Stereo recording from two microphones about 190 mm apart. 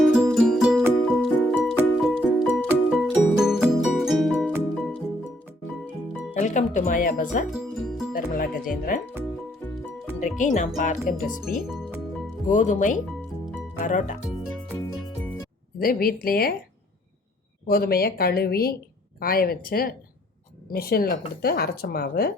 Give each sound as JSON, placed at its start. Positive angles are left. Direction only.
{"t": 0.0, "sound": "music", "side_deg": 0}
{"t": 6.3, "sound": "speech", "side_deg": 40}
{"t": 7.5, "sound": "music", "side_deg": 0}
{"t": 8.1, "sound": "music", "side_deg": 45}
{"t": 10.2, "sound": "speech", "side_deg": 40}
{"t": 11.4, "sound": "speech", "side_deg": 0}
{"t": 12.5, "sound": "speech", "side_deg": 40}
{"t": 15.8, "sound": "speech", "side_deg": 50}
{"t": 17.7, "sound": "speech", "side_deg": 50}